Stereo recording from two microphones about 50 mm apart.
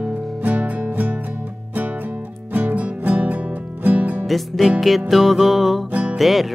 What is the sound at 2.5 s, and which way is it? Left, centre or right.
Music, right.